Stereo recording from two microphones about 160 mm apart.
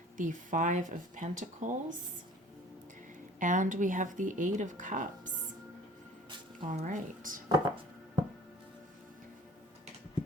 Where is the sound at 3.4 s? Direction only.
55° right (ahead or behind).